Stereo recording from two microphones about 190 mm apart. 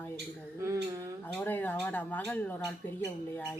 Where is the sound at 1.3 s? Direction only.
10° left (ahead or behind).